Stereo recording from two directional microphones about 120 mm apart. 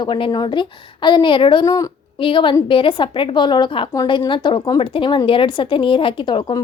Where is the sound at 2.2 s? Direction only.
45° left (ahead or behind).